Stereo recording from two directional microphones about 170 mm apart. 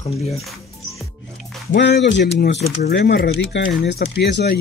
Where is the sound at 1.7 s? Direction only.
90° left.